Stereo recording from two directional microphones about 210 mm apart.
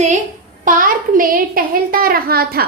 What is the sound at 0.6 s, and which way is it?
A woman's voice, 40° right (ahead or behind).